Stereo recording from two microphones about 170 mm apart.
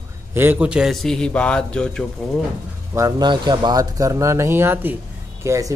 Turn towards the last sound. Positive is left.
turn(degrees=-20)  # may be behind; listen again after turning